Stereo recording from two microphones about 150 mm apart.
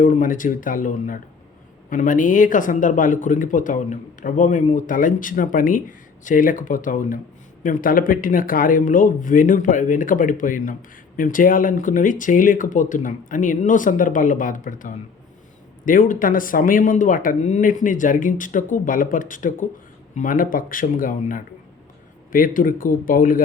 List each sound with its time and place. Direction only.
0.0 s speech: 60° left (ahead or behind)